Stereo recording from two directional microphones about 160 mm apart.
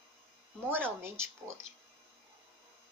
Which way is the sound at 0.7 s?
15° right (ahead or behind).